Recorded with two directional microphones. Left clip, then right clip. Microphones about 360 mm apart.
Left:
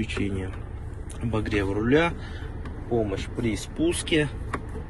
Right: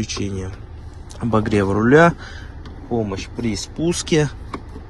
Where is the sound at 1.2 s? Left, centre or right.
Right.